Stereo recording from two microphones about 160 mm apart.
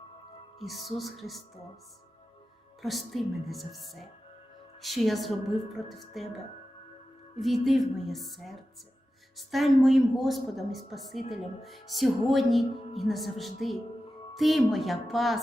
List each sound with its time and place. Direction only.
0.6 s speech: centre (ahead or behind)
2.8 s speech: centre (ahead or behind)
7.3 s speech: centre (ahead or behind)